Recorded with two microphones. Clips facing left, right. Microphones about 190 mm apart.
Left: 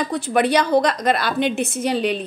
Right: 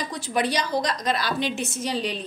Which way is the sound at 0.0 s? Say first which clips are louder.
Left 7 dB; 60° left (ahead or behind).